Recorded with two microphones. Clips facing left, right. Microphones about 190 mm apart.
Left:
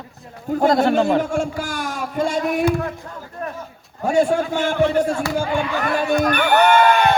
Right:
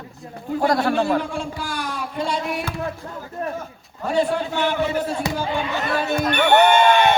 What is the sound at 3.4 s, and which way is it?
Speech, 25° right (ahead or behind).